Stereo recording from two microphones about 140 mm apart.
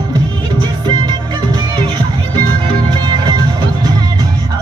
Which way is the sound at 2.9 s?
30° right (ahead or behind).